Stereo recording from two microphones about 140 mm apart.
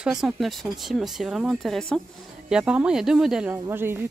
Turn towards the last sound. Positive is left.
turn(degrees=-15)  # may be behind; listen again after turning